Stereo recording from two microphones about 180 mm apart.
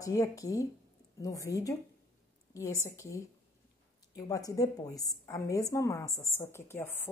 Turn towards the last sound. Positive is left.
turn(degrees=10)  # may be behind; listen again after turning